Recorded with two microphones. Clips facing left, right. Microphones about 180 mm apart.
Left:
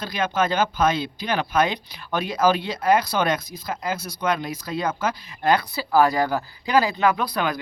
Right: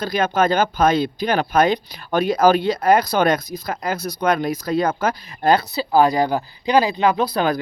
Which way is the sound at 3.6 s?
65° right (ahead or behind).